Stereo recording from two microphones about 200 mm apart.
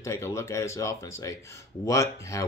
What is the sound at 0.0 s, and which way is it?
Speech, 15° left (ahead or behind).